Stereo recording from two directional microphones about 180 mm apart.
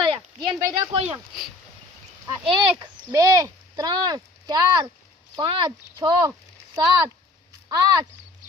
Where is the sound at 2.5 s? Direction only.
20° right (ahead or behind).